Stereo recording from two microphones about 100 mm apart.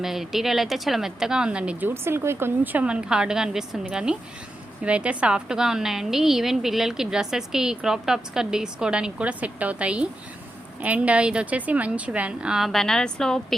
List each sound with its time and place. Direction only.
0.0 s a woman's voice: 5° right (ahead or behind)
1.9 s a woman's voice: 25° right (ahead or behind)
2.8 s a woman's voice: 10° right (ahead or behind)